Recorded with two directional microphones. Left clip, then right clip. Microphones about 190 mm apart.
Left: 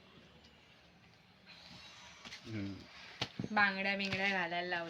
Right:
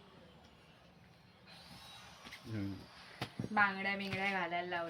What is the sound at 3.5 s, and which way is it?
Speech, 40° left (ahead or behind).